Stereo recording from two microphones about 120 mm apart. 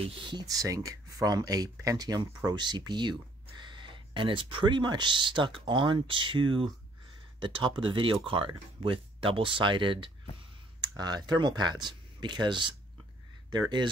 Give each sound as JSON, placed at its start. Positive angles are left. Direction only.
{"t": 0.0, "sound": "speech", "side_deg": -45}